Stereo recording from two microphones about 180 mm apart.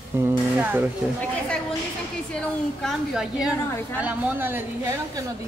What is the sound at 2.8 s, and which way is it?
A woman's voice, 5° right (ahead or behind).